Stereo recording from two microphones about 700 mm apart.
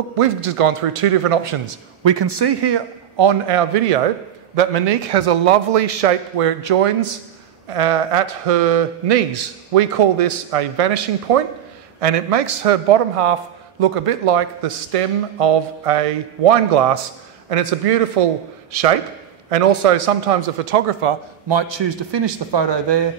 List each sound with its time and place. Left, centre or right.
0.2 s a man's voice: right
21.5 s a man's voice: right